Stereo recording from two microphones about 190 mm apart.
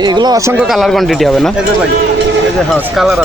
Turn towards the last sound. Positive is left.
turn(degrees=0)  # may be behind; listen again after turning